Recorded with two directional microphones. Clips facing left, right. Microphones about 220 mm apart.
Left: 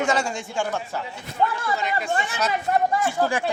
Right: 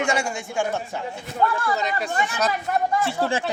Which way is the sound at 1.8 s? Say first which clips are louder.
Right 1 dB; 40° right (ahead or behind).